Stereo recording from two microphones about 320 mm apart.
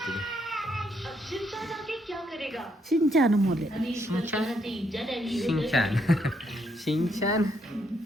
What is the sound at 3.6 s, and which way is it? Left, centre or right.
A woman's voice, centre.